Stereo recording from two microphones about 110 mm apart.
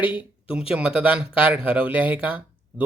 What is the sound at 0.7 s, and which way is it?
Speech, 5° right (ahead or behind).